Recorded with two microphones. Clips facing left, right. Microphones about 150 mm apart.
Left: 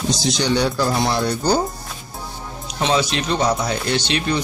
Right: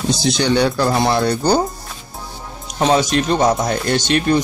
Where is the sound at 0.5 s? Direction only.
55° right (ahead or behind).